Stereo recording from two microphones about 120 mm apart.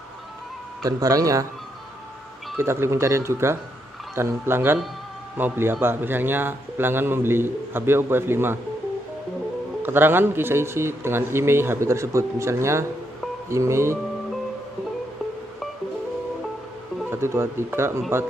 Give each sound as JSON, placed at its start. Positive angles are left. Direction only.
{"t": 0.8, "sound": "a man's voice", "side_deg": -30}
{"t": 2.5, "sound": "a man's voice", "side_deg": -20}
{"t": 9.8, "sound": "a man's voice", "side_deg": -15}
{"t": 17.1, "sound": "a man's voice", "side_deg": -20}